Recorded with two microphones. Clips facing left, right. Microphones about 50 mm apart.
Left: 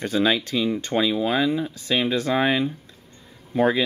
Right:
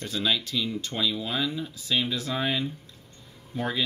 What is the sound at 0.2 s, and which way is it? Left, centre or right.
Speech, left.